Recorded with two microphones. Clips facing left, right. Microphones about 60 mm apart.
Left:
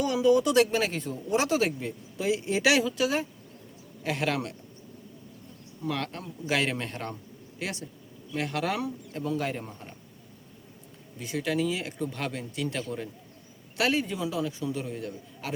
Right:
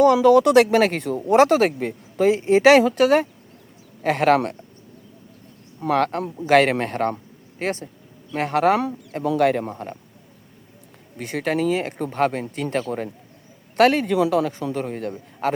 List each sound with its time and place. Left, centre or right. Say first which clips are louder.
0.0 s speech: right 9 dB; right
2.8 s a man's voice: right 11 dB; right
5.8 s a man's voice: right 12 dB; right
9.2 s a man's voice: right 12 dB; right
11.2 s a man's voice: right 6 dB; right